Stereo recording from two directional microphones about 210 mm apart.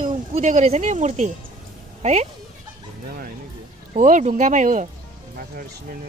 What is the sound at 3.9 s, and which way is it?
Speech, 35° right (ahead or behind).